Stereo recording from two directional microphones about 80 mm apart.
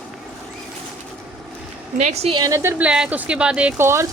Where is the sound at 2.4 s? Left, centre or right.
Right.